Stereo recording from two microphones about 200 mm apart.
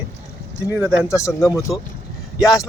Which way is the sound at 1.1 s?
15° left (ahead or behind).